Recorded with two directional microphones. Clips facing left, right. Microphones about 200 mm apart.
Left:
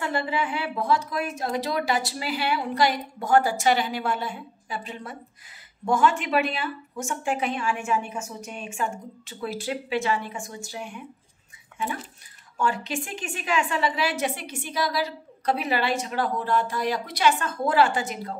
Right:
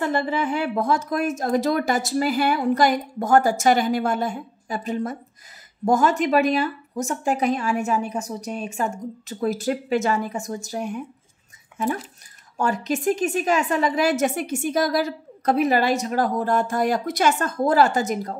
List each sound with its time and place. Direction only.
0.0 s a woman's voice: 45° right (ahead or behind)
12.5 s a woman's voice: 40° right (ahead or behind)